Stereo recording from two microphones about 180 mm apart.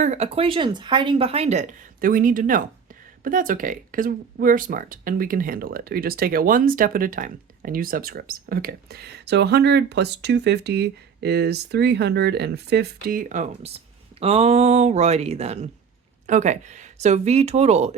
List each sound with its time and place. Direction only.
0.0 s speech: 35° right (ahead or behind)